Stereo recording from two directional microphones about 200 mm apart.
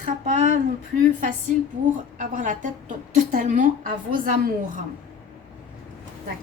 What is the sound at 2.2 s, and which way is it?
A woman's voice, 40° right (ahead or behind).